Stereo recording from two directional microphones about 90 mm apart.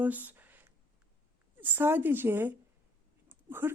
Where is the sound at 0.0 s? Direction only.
20° right (ahead or behind).